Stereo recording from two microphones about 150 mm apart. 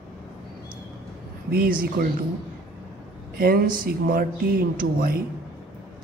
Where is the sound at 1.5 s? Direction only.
75° right (ahead or behind).